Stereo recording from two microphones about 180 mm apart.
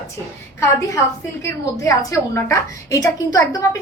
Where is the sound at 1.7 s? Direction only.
15° left (ahead or behind).